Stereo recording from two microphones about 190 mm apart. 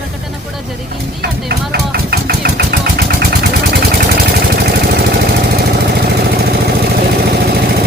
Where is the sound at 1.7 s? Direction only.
55° right (ahead or behind).